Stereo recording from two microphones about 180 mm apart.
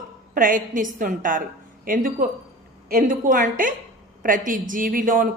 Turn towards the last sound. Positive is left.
turn(degrees=-50)  # may be behind; listen again after turning